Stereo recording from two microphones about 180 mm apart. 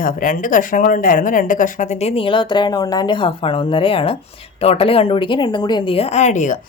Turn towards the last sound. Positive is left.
turn(degrees=45)  # may be behind; listen again after turning